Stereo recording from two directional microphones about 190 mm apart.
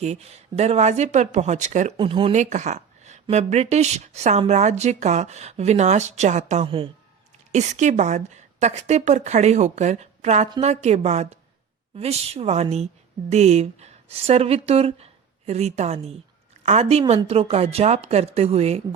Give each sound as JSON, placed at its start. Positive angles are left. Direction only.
{"t": 0.0, "sound": "speech", "side_deg": -35}
{"t": 2.0, "sound": "speech", "side_deg": -30}
{"t": 7.5, "sound": "speech", "side_deg": -40}